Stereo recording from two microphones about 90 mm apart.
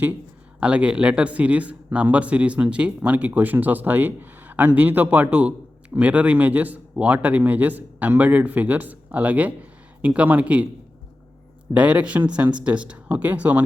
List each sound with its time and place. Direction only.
0.6 s speech: 15° right (ahead or behind)
11.7 s speech: 15° right (ahead or behind)